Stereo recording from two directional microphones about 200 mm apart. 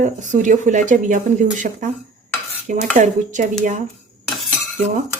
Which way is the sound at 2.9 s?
40° right (ahead or behind).